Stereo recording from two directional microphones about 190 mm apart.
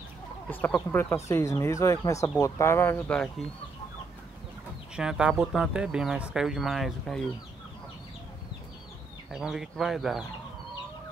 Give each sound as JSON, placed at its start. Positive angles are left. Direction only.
{"t": 0.5, "sound": "speech", "side_deg": 5}
{"t": 4.9, "sound": "speech", "side_deg": -5}
{"t": 9.3, "sound": "speech", "side_deg": -5}